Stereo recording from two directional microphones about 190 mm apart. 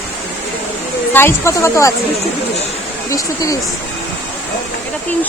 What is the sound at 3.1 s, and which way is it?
Speech, 15° left (ahead or behind).